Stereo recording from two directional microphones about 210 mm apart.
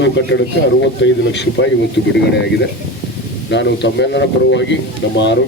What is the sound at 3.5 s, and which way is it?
Speech, 55° left (ahead or behind).